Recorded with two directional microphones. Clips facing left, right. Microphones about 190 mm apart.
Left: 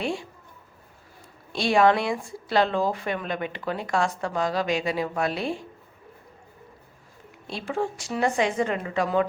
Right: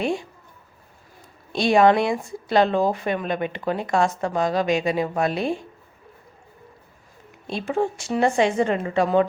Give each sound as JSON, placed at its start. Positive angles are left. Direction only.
{"t": 0.0, "sound": "a sound", "side_deg": -20}
{"t": 1.5, "sound": "speech", "side_deg": -20}
{"t": 7.4, "sound": "speech", "side_deg": -20}